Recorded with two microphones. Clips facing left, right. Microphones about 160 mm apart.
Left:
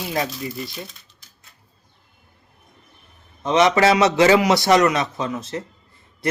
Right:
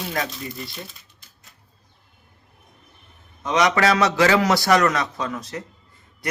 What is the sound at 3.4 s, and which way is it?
A man's voice, 25° left (ahead or behind).